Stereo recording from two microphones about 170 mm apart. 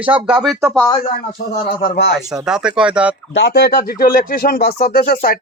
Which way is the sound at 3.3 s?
85° left.